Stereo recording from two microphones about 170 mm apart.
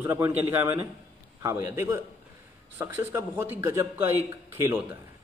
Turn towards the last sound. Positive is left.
turn(degrees=-15)  # may be behind; listen again after turning